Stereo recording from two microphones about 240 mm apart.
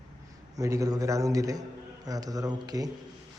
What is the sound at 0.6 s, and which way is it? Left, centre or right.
Speech, centre.